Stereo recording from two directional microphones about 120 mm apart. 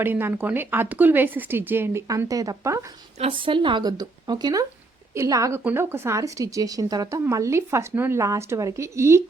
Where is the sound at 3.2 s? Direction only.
45° right (ahead or behind).